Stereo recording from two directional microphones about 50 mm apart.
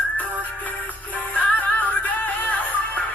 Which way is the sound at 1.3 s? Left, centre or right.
Left.